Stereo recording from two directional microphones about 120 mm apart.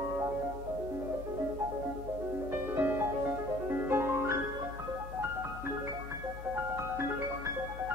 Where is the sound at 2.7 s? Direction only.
20° right (ahead or behind).